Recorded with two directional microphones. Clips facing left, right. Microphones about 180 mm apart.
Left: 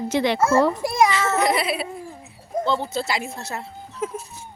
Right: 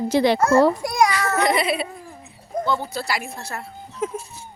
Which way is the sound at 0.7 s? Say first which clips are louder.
Left 1 dB; 25° left (ahead or behind).